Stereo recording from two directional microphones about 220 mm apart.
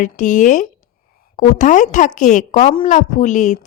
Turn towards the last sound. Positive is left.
turn(degrees=35)  # may be behind; listen again after turning